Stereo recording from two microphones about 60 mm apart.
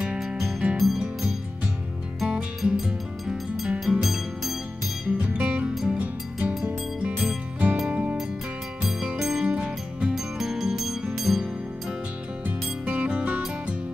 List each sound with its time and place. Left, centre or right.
0.2 s music: centre
0.7 s music: centre
2.2 s music: centre
2.8 s music: centre
5.0 s music: centre
8.8 s music: centre
10.1 s music: centre
12.4 s music: right